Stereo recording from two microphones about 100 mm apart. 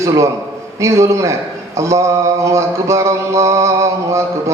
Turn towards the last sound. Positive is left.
turn(degrees=-30)  # may be behind; listen again after turning